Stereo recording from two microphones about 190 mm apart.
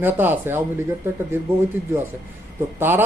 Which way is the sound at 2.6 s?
10° right (ahead or behind).